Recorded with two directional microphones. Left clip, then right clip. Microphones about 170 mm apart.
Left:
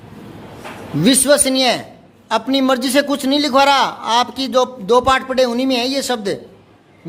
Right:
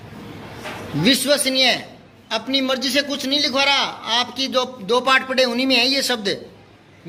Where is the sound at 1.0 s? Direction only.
40° left (ahead or behind); by 6.4 s 25° left (ahead or behind).